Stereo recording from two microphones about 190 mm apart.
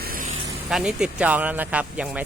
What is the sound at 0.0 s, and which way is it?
Vehicle, 50° right (ahead or behind).